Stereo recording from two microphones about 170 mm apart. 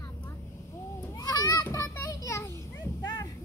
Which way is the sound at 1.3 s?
20° left (ahead or behind).